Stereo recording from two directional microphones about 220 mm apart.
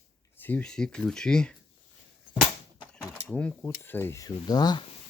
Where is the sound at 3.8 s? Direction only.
10° left (ahead or behind).